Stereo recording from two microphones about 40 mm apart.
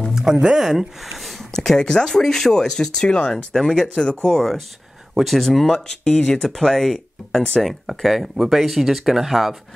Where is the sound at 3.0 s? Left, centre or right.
Left.